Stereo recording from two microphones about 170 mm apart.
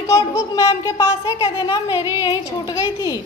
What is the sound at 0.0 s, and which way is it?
A woman's voice, 15° left (ahead or behind).